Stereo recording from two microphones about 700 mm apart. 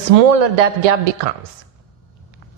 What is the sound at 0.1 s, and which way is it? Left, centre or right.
Speech, right.